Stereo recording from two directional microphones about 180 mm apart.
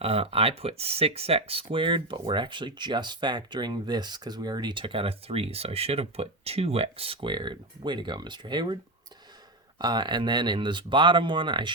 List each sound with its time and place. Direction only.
0.0 s speech: 35° right (ahead or behind)